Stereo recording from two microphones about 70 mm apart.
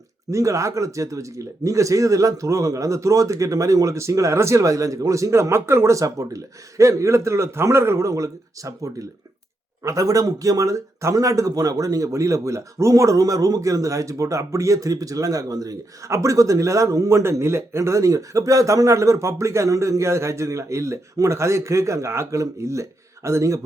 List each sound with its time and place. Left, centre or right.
0.3 s speech: right
17.1 s speech: right